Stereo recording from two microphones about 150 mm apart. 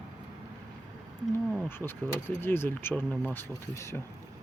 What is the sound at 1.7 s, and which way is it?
Speech, 15° left (ahead or behind).